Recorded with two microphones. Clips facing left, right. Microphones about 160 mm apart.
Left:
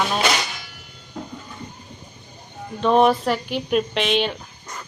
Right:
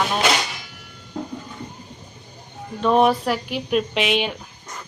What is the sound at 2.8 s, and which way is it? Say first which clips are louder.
Speech: left 1 dB; centre (ahead or behind).